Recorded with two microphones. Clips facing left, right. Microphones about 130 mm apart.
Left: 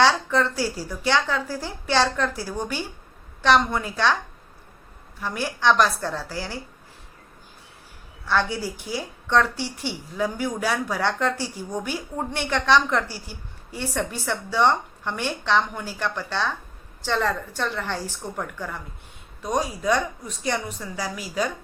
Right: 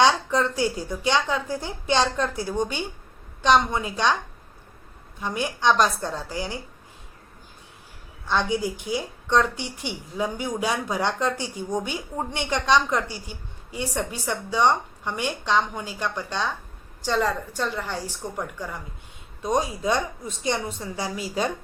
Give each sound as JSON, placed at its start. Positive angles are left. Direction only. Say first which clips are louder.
{"t": 0.0, "sound": "a woman's voice", "louder": "even", "side_deg": -15}
{"t": 5.2, "sound": "a woman's voice", "louder": "even", "side_deg": -20}
{"t": 8.3, "sound": "a woman's voice", "louder": "even", "side_deg": -20}
{"t": 19.5, "sound": "a woman's voice", "louder": "left 1 dB", "side_deg": -25}